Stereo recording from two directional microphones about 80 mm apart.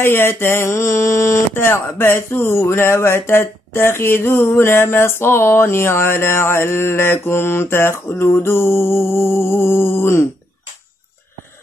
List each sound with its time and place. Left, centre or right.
0.0 s speech: left